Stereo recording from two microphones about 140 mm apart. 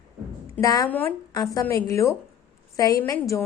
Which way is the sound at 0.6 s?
25° left (ahead or behind).